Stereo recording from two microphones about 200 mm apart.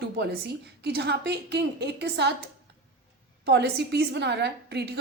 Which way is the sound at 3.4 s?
55° right (ahead or behind).